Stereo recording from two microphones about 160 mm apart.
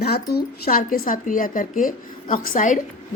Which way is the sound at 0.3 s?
70° left (ahead or behind).